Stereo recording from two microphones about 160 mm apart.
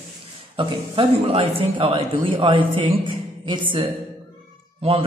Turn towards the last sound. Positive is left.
turn(degrees=-40)  # may be behind; listen again after turning